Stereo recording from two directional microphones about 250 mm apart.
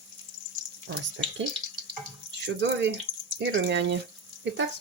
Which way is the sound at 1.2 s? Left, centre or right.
Right.